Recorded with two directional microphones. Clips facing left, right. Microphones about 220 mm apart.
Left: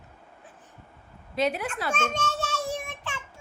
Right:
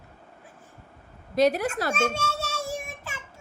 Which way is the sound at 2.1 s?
10° right (ahead or behind).